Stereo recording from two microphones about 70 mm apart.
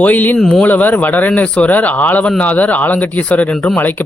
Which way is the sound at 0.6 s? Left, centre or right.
Left.